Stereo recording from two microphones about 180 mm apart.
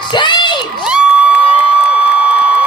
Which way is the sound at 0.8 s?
5° right (ahead or behind).